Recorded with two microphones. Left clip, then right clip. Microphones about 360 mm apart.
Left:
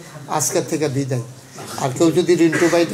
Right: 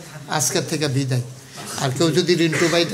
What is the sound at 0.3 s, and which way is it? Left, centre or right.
A man's voice, right.